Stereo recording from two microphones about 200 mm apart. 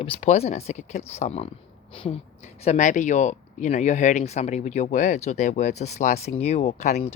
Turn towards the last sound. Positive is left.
turn(degrees=35)  # may be behind; listen again after turning